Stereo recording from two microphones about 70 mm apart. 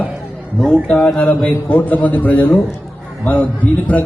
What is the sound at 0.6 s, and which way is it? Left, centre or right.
Speech, centre.